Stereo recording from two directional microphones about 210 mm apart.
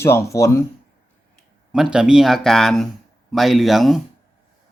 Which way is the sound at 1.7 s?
5° right (ahead or behind).